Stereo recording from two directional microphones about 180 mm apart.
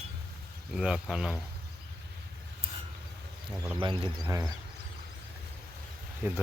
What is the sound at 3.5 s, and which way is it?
Speech, 25° right (ahead or behind).